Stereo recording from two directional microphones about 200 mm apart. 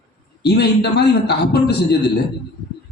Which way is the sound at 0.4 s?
55° left (ahead or behind).